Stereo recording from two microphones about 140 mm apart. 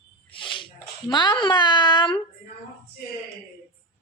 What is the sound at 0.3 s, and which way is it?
Speech, 35° left (ahead or behind).